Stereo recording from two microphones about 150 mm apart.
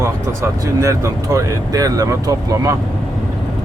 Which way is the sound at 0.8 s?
20° right (ahead or behind).